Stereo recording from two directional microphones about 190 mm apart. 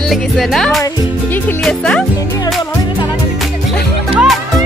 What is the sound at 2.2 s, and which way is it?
Speech, 15° left (ahead or behind).